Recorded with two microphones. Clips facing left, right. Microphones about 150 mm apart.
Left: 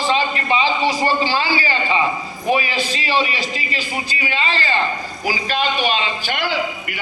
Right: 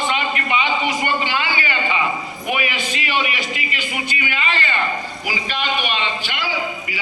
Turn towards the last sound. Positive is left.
turn(degrees=60)  # may be behind; listen again after turning